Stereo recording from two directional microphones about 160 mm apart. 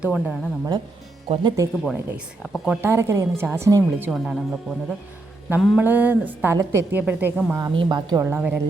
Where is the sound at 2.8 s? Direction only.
15° right (ahead or behind).